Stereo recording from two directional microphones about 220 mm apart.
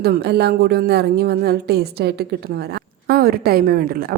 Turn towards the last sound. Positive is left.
turn(degrees=-40)  # may be behind; listen again after turning